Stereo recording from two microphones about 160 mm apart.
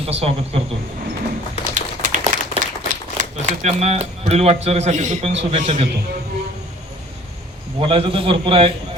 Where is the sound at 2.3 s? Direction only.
50° right (ahead or behind).